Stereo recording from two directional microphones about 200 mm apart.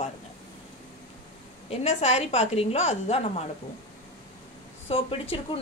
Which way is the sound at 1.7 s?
30° left (ahead or behind).